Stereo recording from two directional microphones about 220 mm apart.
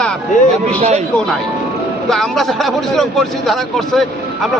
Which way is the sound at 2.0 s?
Centre (ahead or behind).